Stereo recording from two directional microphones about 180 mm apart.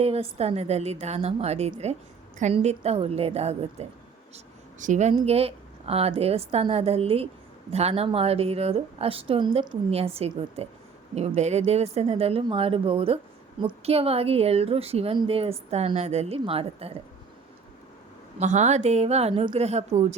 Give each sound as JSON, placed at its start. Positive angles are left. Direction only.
{"t": 0.0, "sound": "a woman's voice", "side_deg": -35}
{"t": 18.3, "sound": "a woman's voice", "side_deg": -40}